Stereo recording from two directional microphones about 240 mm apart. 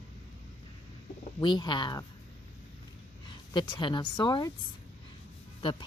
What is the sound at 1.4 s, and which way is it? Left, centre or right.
Speech, centre.